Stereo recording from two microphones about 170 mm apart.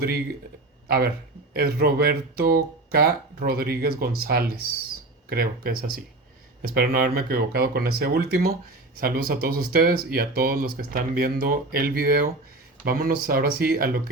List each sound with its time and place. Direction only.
0.9 s speech: 65° right (ahead or behind)